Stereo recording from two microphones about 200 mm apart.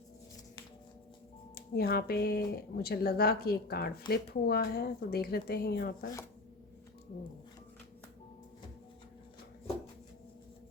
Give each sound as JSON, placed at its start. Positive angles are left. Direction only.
{"t": 1.5, "sound": "speech", "side_deg": 50}